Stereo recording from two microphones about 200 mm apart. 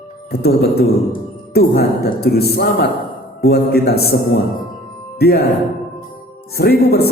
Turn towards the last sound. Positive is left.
turn(degrees=50)  # may be behind; listen again after turning